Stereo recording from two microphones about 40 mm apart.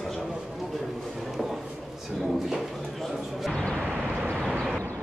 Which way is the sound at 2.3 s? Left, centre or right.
Centre.